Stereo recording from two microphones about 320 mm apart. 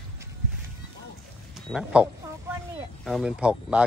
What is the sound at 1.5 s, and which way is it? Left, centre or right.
A man's voice, centre.